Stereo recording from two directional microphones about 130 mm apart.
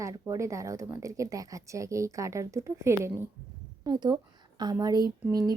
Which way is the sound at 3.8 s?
35° right (ahead or behind).